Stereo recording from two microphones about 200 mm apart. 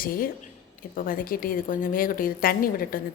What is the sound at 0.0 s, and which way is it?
A woman's voice, 45° left (ahead or behind).